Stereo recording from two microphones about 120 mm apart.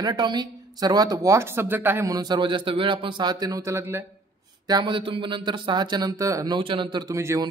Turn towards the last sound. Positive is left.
turn(degrees=-25)  # may be behind; listen again after turning